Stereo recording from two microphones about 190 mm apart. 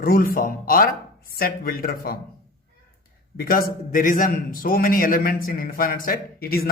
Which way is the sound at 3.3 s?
50° left (ahead or behind).